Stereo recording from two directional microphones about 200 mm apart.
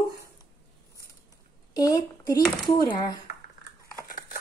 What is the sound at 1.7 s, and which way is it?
A woman's voice, 20° left (ahead or behind).